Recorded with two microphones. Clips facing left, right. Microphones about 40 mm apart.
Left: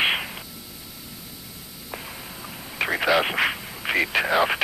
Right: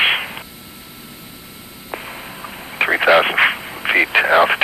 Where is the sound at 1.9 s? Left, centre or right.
Right.